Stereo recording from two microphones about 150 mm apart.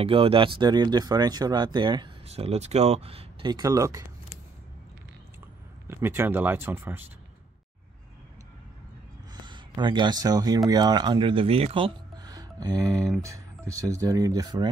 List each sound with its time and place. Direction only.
0.0 s speech: 40° right (ahead or behind)
2.2 s speech: 45° right (ahead or behind); by 4.0 s 20° right (ahead or behind)
5.9 s speech: 15° right (ahead or behind)
9.3 s speech: 30° right (ahead or behind)